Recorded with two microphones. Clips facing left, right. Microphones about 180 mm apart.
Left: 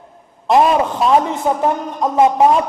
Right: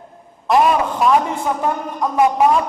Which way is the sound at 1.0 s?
20° left (ahead or behind).